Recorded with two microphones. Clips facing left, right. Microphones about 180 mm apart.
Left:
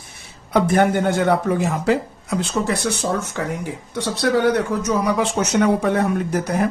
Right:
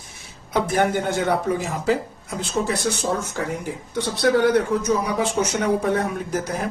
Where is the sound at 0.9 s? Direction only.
55° left (ahead or behind).